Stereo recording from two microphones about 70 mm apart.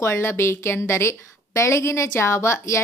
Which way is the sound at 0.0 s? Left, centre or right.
Left.